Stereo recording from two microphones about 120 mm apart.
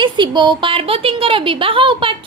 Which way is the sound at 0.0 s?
40° right (ahead or behind).